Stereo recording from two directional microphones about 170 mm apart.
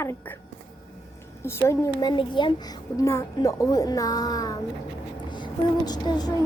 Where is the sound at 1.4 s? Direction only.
15° left (ahead or behind).